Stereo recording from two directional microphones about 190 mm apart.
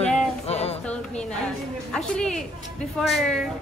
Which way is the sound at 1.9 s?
5° left (ahead or behind).